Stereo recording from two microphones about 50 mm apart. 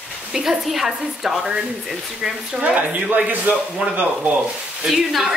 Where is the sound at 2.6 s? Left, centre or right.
Right.